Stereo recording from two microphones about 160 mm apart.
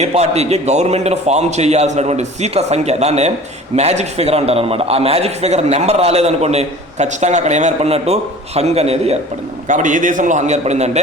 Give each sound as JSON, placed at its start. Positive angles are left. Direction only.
{"t": 0.0, "sound": "a man's voice", "side_deg": -40}
{"t": 9.6, "sound": "a man's voice", "side_deg": -50}